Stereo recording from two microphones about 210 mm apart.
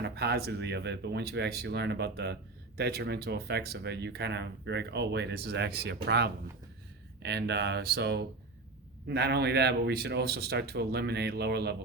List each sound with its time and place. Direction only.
0.0 s speech: 50° right (ahead or behind)